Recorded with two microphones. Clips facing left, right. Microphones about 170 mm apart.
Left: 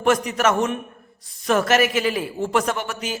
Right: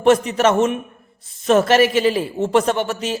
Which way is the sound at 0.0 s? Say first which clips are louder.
Right 5 dB; 25° right (ahead or behind).